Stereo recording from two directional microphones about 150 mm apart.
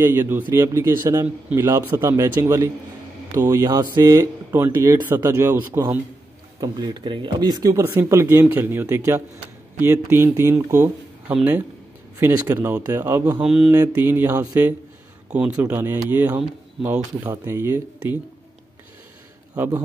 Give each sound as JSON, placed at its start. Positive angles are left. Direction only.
{"t": 0.0, "sound": "a man's voice", "side_deg": -15}
{"t": 13.7, "sound": "a man's voice", "side_deg": -15}
{"t": 19.5, "sound": "a man's voice", "side_deg": -15}